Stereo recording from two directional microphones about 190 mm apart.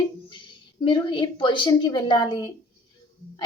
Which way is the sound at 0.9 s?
25° left (ahead or behind).